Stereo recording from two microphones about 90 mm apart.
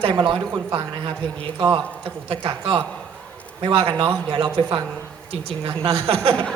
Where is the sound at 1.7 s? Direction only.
70° right (ahead or behind).